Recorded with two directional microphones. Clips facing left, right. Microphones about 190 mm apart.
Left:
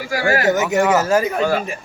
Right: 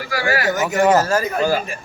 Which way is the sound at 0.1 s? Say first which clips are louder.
Left 2 dB; 45° left (ahead or behind).